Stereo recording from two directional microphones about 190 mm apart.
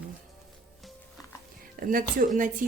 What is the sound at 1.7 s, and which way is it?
Speech, 45° right (ahead or behind).